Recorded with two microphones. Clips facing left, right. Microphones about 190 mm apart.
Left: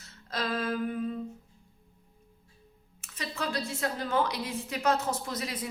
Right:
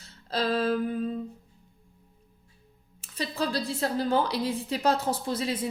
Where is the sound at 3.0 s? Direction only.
35° right (ahead or behind).